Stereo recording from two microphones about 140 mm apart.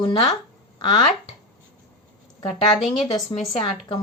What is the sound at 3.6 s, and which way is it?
Speech, 30° left (ahead or behind).